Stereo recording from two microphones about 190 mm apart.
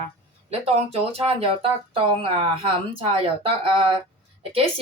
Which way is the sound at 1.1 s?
30° right (ahead or behind).